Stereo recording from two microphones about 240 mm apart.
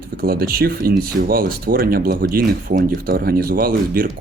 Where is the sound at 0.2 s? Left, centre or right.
Right.